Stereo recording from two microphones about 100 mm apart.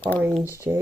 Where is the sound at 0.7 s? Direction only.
25° right (ahead or behind).